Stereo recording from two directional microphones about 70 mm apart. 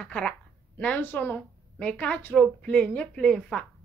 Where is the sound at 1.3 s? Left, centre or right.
Centre.